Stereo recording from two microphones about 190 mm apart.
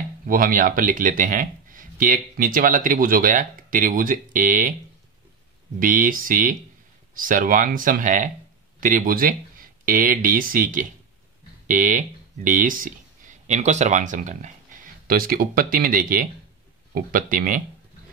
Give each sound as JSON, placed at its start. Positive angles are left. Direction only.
{"t": 0.3, "sound": "speech", "side_deg": -50}
{"t": 5.8, "sound": "speech", "side_deg": -45}